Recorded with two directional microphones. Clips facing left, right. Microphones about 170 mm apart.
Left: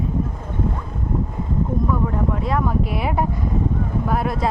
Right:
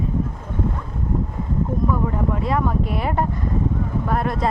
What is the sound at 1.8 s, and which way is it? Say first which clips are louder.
Speech: even; centre (ahead or behind).